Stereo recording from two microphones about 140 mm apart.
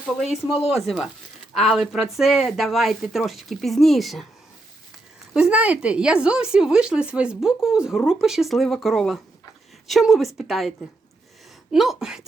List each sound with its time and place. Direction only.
0.5 s speech: 45° left (ahead or behind)
0.9 s speech: 5° right (ahead or behind)
5.3 s speech: 5° right (ahead or behind)